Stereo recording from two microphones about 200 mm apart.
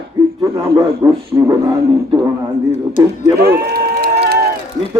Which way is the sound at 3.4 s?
50° right (ahead or behind).